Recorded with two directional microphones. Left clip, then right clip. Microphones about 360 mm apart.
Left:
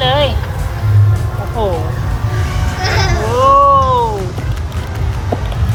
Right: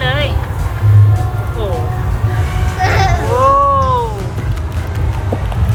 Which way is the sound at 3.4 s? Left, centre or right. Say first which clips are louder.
Left 3 dB; centre.